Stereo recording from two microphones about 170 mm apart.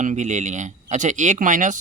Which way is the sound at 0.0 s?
45° right (ahead or behind).